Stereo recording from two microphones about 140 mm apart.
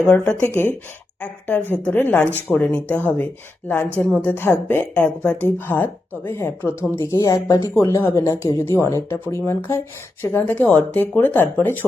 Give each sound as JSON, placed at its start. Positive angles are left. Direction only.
{"t": 0.1, "sound": "a woman's voice", "side_deg": 10}